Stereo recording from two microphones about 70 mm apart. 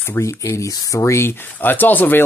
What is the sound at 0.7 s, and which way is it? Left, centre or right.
Speech, left.